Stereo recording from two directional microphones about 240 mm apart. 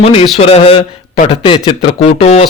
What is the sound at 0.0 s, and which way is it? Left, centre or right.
A man's voice, left.